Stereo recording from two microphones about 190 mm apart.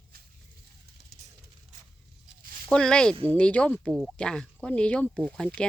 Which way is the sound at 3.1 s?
30° right (ahead or behind).